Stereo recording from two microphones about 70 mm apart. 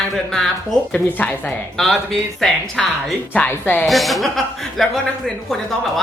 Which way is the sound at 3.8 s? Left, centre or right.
Centre.